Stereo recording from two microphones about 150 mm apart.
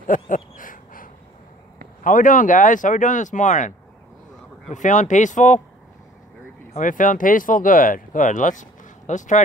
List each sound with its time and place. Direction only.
0.0 s a sound: 60° left (ahead or behind)
2.0 s speech: 60° left (ahead or behind)
4.7 s speech: 55° left (ahead or behind)
6.7 s speech: 60° left (ahead or behind)